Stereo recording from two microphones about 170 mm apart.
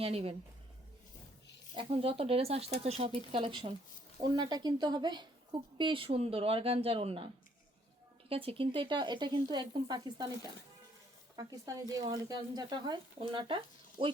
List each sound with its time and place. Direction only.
0.0 s a woman's voice: 35° right (ahead or behind)
1.7 s a woman's voice: 30° right (ahead or behind)
8.3 s speech: 35° right (ahead or behind)
11.3 s speech: 20° right (ahead or behind)
14.0 s a woman's voice: 40° right (ahead or behind)